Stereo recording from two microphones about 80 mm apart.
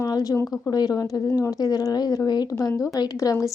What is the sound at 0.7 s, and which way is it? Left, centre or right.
Speech, left.